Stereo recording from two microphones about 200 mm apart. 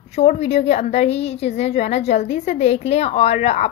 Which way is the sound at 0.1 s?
30° left (ahead or behind).